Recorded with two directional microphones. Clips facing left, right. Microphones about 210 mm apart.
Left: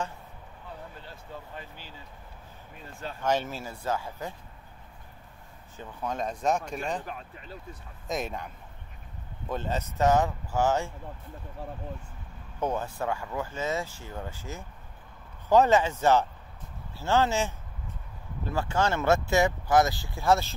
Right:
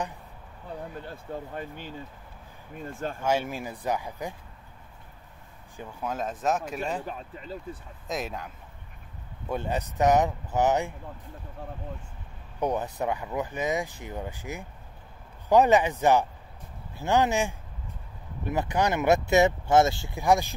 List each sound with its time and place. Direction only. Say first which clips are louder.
0.9 s speech: right 7 dB; 50° right (ahead or behind)
3.2 s speech: even; 10° right (ahead or behind)
5.8 s speech: even; 5° right (ahead or behind)
8.1 s speech: even; centre (ahead or behind)
9.5 s speech: right 2 dB; 15° right (ahead or behind)
12.5 s speech: right 2 dB; 15° right (ahead or behind)